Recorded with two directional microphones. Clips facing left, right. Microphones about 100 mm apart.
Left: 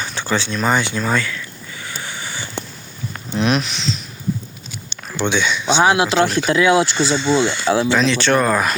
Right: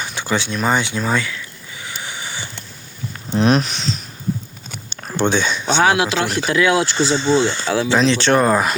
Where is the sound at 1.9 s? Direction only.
15° right (ahead or behind).